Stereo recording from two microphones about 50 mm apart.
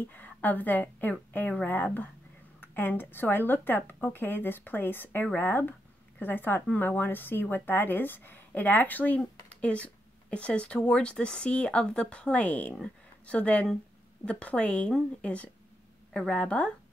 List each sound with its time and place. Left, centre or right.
0.0 s a woman's voice: left
9.6 s speech: left